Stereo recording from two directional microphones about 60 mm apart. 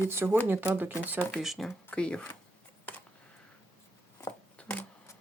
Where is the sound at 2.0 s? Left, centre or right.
Centre.